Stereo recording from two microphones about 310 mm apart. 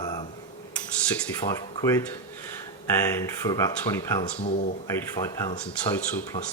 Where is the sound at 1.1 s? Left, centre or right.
Centre.